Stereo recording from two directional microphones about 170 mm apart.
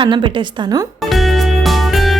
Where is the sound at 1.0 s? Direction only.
Centre (ahead or behind).